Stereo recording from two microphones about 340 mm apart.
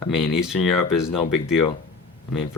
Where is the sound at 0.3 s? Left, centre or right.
Centre.